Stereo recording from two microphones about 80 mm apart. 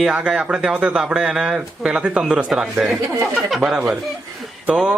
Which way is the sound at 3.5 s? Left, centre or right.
Centre.